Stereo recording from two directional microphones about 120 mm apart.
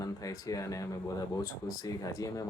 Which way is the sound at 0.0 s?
30° left (ahead or behind).